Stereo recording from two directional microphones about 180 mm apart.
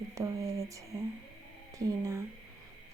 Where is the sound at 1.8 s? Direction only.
20° right (ahead or behind).